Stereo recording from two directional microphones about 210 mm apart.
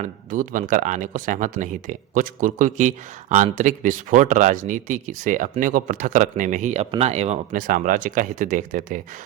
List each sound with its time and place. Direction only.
0.0 s speech: 40° right (ahead or behind)